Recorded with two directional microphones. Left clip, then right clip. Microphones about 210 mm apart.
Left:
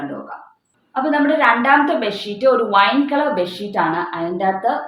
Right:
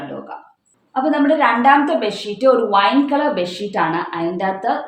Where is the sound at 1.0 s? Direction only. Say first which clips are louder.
Even; 55° right (ahead or behind).